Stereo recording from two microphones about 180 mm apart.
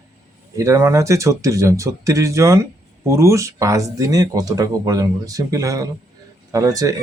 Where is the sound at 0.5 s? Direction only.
15° right (ahead or behind).